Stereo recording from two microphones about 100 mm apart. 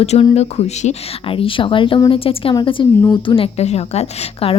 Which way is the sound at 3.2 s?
65° left (ahead or behind).